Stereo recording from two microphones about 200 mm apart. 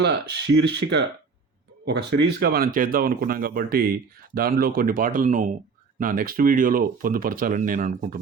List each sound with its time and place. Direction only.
0.0 s speech: 55° right (ahead or behind)